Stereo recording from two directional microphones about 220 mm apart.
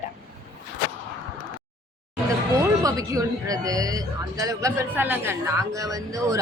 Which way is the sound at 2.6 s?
15° right (ahead or behind).